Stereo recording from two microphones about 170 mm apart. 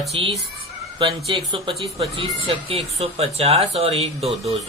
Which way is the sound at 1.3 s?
30° right (ahead or behind).